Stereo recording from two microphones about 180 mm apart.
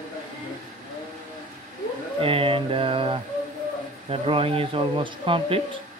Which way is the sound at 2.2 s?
30° right (ahead or behind).